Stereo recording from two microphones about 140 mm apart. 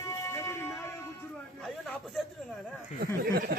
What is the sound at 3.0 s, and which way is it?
Speech, 90° right.